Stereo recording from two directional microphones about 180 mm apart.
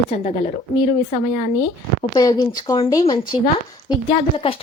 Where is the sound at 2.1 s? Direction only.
20° left (ahead or behind).